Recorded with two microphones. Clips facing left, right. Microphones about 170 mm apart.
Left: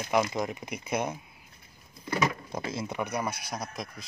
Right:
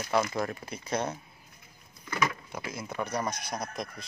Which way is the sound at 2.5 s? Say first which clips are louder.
Left 4 dB; 30° left (ahead or behind).